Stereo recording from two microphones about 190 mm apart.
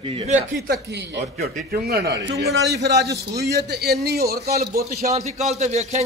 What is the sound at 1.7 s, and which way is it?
A man's voice, 60° right (ahead or behind).